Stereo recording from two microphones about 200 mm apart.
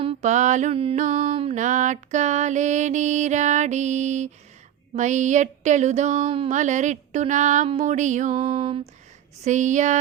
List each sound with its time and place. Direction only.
0.0 s mantra: 35° right (ahead or behind)